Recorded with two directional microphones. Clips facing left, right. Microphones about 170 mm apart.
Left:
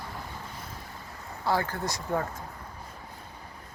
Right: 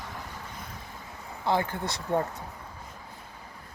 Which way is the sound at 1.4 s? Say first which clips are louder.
Right 1 dB; 20° right (ahead or behind).